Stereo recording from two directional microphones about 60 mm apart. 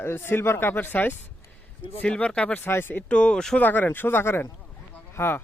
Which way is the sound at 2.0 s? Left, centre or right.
Centre.